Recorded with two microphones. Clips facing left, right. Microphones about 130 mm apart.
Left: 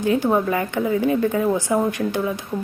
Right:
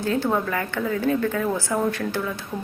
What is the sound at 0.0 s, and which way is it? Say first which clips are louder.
A woman's voice: left 4 dB; 15° left (ahead or behind).